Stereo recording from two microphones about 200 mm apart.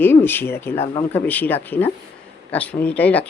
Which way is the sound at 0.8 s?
25° left (ahead or behind).